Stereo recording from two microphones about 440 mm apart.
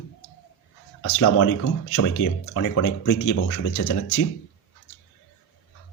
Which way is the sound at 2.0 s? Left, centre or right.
Left.